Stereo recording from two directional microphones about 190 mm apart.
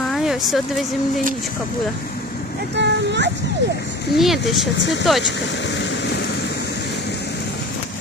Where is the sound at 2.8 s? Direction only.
65° right (ahead or behind).